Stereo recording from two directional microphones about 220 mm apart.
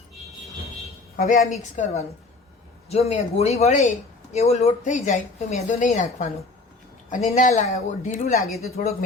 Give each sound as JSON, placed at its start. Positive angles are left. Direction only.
{"t": 1.1, "sound": "speech", "side_deg": 40}